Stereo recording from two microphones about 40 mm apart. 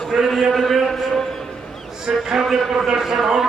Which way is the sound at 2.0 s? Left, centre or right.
Centre.